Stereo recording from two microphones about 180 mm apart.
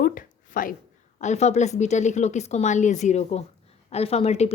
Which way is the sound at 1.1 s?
40° left (ahead or behind).